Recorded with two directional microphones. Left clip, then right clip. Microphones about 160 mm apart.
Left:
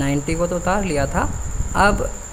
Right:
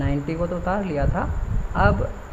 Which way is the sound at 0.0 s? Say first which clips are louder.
Left 5 dB; 35° left (ahead or behind).